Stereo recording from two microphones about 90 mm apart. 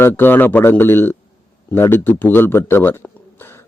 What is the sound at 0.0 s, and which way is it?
A man's voice, 25° left (ahead or behind).